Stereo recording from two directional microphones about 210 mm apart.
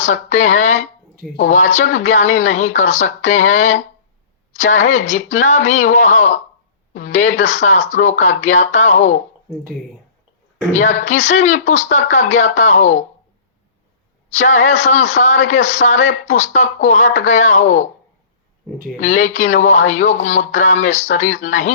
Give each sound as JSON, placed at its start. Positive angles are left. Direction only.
{"t": 0.0, "sound": "speech", "side_deg": 35}
{"t": 10.7, "sound": "speech", "side_deg": 35}
{"t": 14.3, "sound": "speech", "side_deg": 35}
{"t": 18.9, "sound": "speech", "side_deg": 35}